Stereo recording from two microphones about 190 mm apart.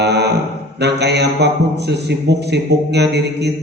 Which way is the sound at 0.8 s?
60° right (ahead or behind).